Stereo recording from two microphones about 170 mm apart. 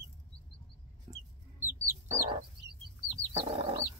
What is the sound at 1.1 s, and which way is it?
Chicken, 20° right (ahead or behind).